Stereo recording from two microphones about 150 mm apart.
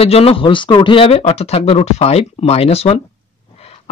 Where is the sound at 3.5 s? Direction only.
45° left (ahead or behind).